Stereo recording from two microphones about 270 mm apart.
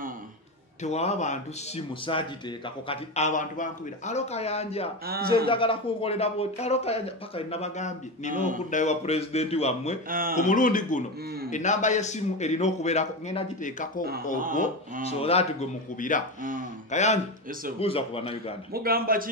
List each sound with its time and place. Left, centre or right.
0.8 s speech: left
5.0 s a man's voice: right
5.5 s speech: centre
10.0 s a man's voice: right
10.3 s speech: left
15.0 s speech: left
18.7 s a man's voice: right